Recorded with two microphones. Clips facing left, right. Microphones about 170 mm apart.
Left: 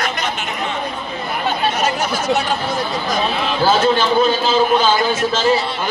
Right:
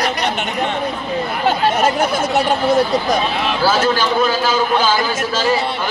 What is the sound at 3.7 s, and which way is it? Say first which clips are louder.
Speech: left 3 dB; 25° left (ahead or behind).